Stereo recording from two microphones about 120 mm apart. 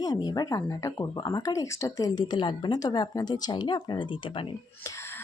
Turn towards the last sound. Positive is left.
turn(degrees=20)  # may be behind; listen again after turning